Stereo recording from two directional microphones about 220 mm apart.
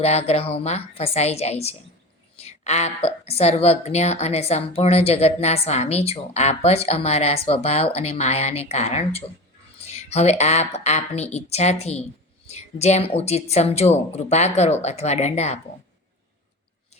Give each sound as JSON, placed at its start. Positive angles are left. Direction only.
{"t": 0.0, "sound": "a woman's voice", "side_deg": 30}